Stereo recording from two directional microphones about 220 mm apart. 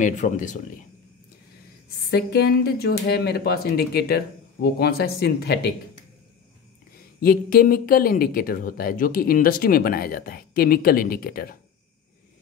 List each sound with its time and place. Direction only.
0.0 s speech: 35° left (ahead or behind)
2.0 s speech: 45° left (ahead or behind)
7.2 s speech: 40° left (ahead or behind)